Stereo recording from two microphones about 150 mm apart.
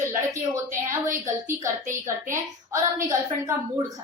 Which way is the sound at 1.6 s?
20° right (ahead or behind).